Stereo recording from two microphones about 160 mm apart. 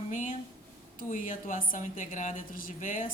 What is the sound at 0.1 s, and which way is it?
A woman's voice, 50° left (ahead or behind).